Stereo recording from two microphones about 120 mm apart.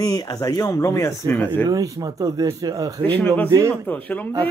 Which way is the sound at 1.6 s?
30° right (ahead or behind).